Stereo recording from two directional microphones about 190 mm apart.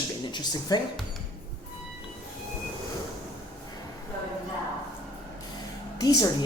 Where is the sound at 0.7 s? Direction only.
20° left (ahead or behind).